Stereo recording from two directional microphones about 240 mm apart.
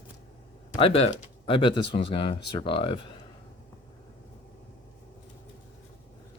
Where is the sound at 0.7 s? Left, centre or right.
Left.